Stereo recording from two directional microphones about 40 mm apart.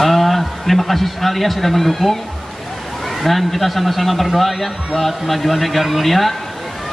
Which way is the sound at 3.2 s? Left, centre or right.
Centre.